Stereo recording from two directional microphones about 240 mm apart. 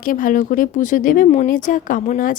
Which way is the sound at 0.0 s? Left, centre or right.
Left.